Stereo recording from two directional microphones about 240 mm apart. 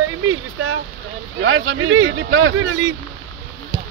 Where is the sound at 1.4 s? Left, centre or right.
Right.